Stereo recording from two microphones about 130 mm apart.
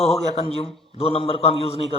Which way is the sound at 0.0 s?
50° left (ahead or behind).